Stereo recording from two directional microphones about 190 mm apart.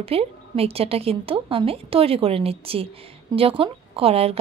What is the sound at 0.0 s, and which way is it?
A woman's voice, 30° right (ahead or behind).